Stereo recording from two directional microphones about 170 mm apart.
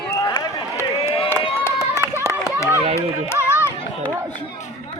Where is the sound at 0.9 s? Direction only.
35° left (ahead or behind).